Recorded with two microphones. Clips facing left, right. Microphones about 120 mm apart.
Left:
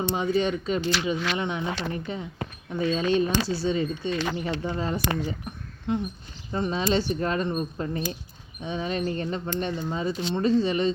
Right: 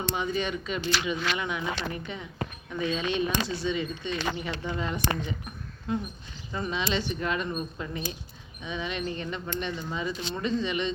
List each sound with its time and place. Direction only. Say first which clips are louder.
0.2 s speech: left 5 dB; 30° left (ahead or behind)
5.9 s speech: left 3 dB; 20° left (ahead or behind)
6.5 s speech: left 5 dB; 35° left (ahead or behind)